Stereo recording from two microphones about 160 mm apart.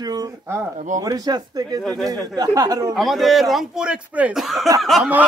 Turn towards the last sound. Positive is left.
turn(degrees=0)  # may be behind; listen again after turning